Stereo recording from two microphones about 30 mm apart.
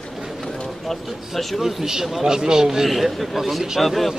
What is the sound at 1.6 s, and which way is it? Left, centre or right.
Speech, centre.